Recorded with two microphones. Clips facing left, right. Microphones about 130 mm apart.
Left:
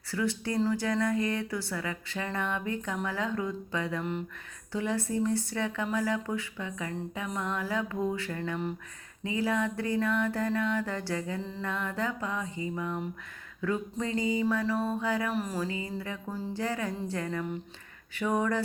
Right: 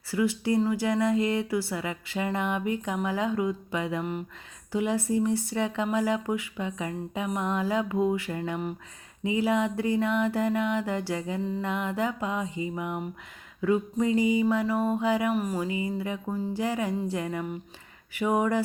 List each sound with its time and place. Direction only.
0.1 s speech: 20° right (ahead or behind)
15.3 s speech: centre (ahead or behind)
15.5 s speech: 20° right (ahead or behind)